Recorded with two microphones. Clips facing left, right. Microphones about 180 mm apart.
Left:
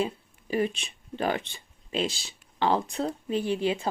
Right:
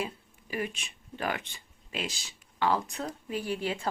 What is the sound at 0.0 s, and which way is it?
A woman's voice, 30° left (ahead or behind).